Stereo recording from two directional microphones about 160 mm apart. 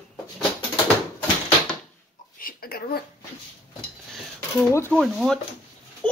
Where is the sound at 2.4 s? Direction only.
65° left (ahead or behind).